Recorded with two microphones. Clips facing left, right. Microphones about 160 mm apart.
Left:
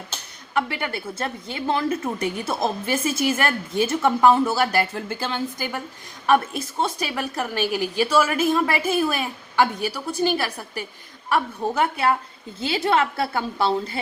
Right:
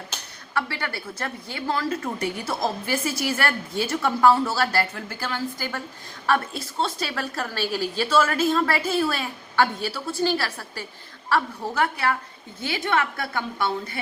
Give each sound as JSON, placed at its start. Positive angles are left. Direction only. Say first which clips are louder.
{"t": 0.5, "sound": "a woman's voice", "louder": "left 4 dB", "side_deg": 20}